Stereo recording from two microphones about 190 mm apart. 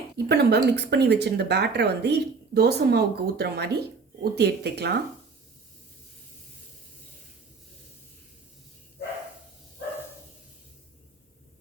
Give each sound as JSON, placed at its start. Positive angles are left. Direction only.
{"t": 0.3, "sound": "speech", "side_deg": -60}